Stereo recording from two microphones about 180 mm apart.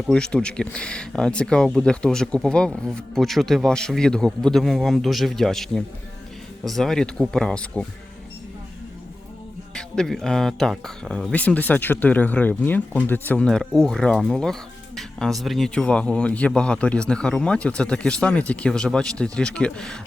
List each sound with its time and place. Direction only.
0.1 s speech: 5° left (ahead or behind)
9.7 s speech: 5° left (ahead or behind)